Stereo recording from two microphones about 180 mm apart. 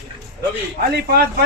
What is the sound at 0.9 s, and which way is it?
Speech, 60° right (ahead or behind).